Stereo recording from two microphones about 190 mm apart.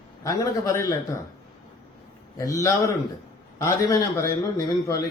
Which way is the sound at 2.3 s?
15° left (ahead or behind).